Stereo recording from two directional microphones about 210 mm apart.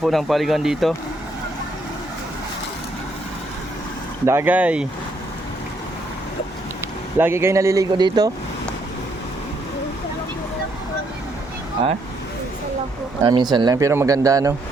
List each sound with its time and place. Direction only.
0.0 s speech: centre (ahead or behind)
4.3 s speech: 10° right (ahead or behind)
7.2 s speech: 10° right (ahead or behind)
13.2 s speech: 20° right (ahead or behind)